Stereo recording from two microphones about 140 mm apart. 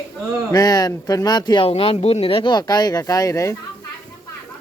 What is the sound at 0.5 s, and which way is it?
Speech, 25° left (ahead or behind).